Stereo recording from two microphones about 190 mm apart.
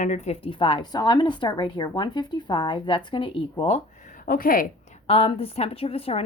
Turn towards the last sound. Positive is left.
turn(degrees=30)  # may be behind; listen again after turning